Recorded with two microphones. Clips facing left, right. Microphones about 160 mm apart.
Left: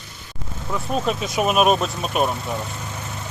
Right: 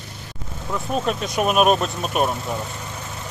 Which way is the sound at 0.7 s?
Centre (ahead or behind).